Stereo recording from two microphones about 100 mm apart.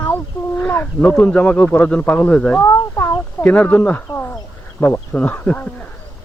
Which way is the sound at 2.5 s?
30° left (ahead or behind).